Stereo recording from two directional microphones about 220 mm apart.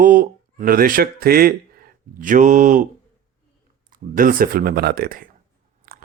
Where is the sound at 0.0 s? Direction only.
40° right (ahead or behind).